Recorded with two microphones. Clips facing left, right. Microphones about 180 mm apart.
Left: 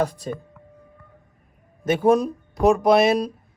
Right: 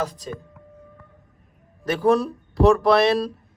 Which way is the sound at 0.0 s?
60° left (ahead or behind).